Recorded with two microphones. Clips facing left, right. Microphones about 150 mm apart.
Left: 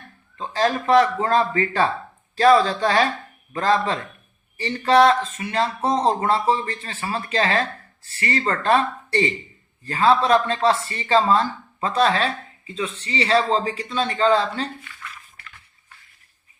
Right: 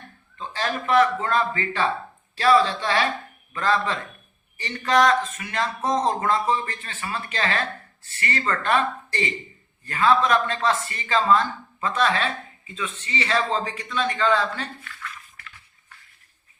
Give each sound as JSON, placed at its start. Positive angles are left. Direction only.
{"t": 0.3, "sound": "speech", "side_deg": 35}